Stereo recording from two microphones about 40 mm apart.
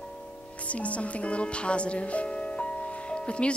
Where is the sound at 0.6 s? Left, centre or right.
Left.